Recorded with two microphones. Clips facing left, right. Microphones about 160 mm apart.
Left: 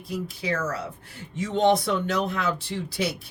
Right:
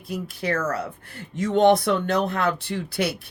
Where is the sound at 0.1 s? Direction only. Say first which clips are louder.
Right 2 dB; 60° right (ahead or behind).